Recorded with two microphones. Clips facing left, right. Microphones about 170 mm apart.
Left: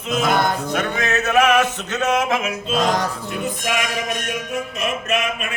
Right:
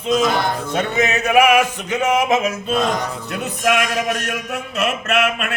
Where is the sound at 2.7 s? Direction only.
90° left.